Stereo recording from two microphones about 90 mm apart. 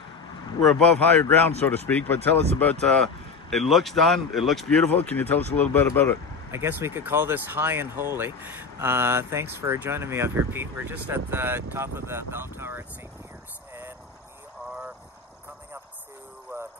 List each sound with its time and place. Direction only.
0.7 s speech: 10° left (ahead or behind)
5.1 s speech: 20° left (ahead or behind)
6.5 s speech: 30° right (ahead or behind)